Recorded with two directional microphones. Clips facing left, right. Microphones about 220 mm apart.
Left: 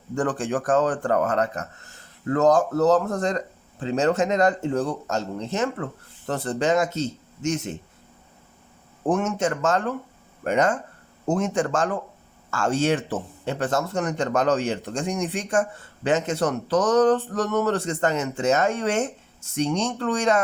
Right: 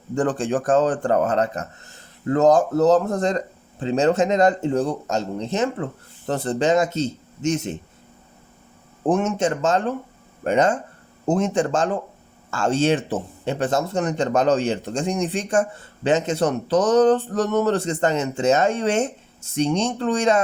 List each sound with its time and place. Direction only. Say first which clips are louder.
0.2 s speech: right 3 dB; 25° right (ahead or behind)
9.0 s speech: right 3 dB; 20° right (ahead or behind)